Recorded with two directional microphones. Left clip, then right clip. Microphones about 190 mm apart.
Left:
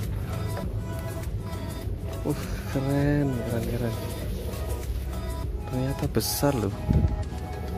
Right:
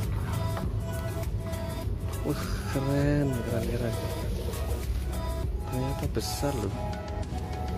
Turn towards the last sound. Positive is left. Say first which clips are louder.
# left 5 dB
turn(degrees=30)  # may be behind; listen again after turning